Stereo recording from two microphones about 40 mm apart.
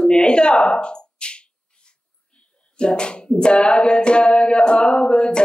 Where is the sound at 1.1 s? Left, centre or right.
Left.